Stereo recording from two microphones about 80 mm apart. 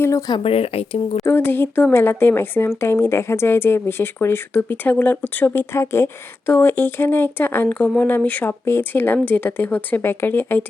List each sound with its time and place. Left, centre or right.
0.0 s speech: left
1.2 s speech: left